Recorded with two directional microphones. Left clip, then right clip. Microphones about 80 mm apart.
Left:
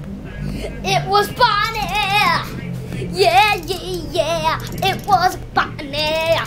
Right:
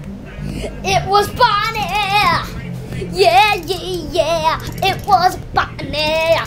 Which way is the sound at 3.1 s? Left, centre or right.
Centre.